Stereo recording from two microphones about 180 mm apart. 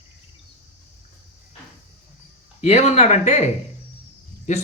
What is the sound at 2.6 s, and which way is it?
A woman's voice, 35° left (ahead or behind).